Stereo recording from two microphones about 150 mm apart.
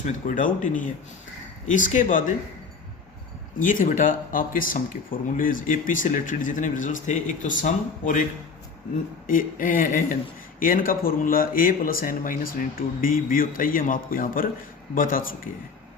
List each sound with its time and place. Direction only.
0.0 s speech: 55° left (ahead or behind)
3.6 s speech: 60° left (ahead or behind)
9.2 s speech: 65° left (ahead or behind)